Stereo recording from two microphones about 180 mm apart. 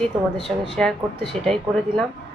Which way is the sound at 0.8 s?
Centre (ahead or behind).